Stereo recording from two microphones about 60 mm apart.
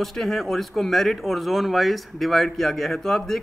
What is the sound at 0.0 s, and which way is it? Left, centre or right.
Speech, centre.